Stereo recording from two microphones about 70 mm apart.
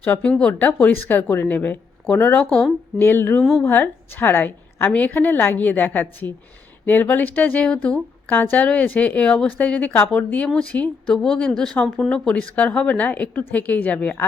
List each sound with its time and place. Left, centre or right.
0.2 s a woman's voice: centre
1.0 s a woman's voice: left
3.0 s a sound: left
3.6 s a woman's voice: left; by 11.8 s centre
11.8 s a woman's voice: centre